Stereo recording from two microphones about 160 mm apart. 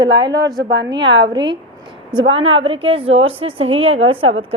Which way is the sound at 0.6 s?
90° right.